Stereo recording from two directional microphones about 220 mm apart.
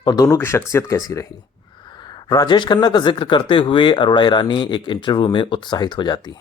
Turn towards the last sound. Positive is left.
turn(degrees=20)  # may be behind; listen again after turning